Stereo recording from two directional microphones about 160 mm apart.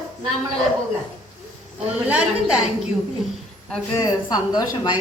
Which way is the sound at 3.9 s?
20° left (ahead or behind).